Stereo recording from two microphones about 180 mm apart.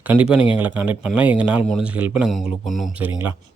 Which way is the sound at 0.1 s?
5° right (ahead or behind).